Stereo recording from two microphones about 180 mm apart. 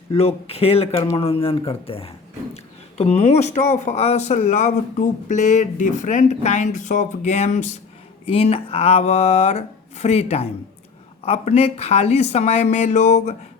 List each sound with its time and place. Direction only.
0.1 s speech: 35° left (ahead or behind)